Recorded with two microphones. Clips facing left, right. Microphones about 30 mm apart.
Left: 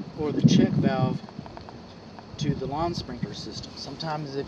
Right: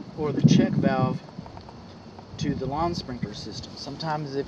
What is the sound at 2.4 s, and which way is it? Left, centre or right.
Speech, centre.